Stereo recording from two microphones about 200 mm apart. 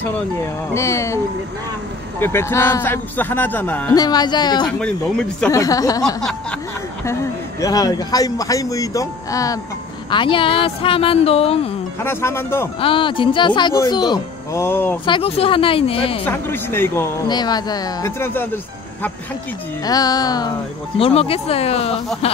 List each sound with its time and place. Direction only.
0.7 s a man's voice: 15° left (ahead or behind)
4.7 s speech: 5° left (ahead or behind)
5.5 s a man's voice: 15° left (ahead or behind)
7.6 s a man's voice: 20° left (ahead or behind)
12.0 s a man's voice: 10° left (ahead or behind)
12.8 s speech: 25° left (ahead or behind)
15.0 s speech: 25° left (ahead or behind)
16.3 s a man's voice: 10° left (ahead or behind)
19.8 s speech: 20° left (ahead or behind)
21.0 s speech: 30° left (ahead or behind)